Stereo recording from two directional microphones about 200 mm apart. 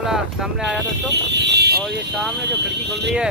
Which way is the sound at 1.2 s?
60° right (ahead or behind).